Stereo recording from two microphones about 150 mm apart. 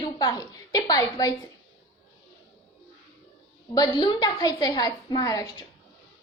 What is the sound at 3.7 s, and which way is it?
A woman's voice, 25° left (ahead or behind).